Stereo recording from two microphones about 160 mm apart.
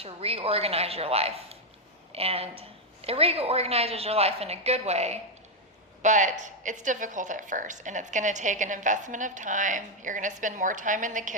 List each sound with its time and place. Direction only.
0.0 s a woman's voice: 40° right (ahead or behind); by 11.3 s 55° right (ahead or behind)